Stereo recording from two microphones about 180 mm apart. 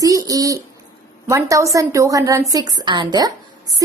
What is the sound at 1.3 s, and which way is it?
A woman's voice, 15° right (ahead or behind).